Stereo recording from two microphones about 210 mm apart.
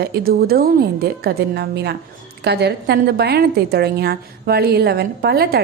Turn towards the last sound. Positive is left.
turn(degrees=-50)  # may be behind; listen again after turning